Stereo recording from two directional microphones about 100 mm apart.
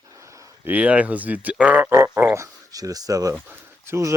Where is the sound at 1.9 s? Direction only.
25° right (ahead or behind).